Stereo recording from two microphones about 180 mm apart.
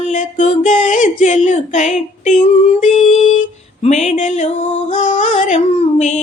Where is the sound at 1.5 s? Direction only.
40° left (ahead or behind).